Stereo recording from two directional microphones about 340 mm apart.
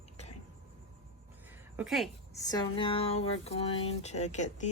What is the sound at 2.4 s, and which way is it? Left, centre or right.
Speech, centre.